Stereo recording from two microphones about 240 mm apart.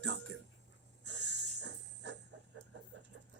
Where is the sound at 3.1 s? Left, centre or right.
Right.